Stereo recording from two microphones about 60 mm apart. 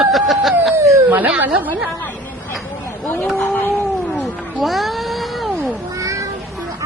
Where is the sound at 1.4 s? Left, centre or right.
Right.